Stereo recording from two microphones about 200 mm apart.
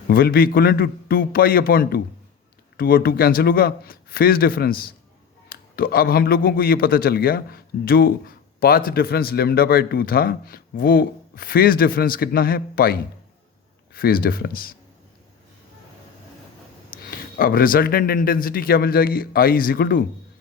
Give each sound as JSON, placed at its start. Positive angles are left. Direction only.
{"t": 0.1, "sound": "a man's voice", "side_deg": 45}
{"t": 16.9, "sound": "a man's voice", "side_deg": 45}